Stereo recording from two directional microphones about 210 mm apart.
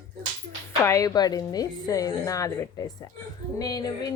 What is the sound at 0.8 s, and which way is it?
A woman's voice, 15° left (ahead or behind).